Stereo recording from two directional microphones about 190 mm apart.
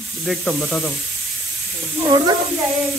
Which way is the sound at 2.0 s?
20° right (ahead or behind).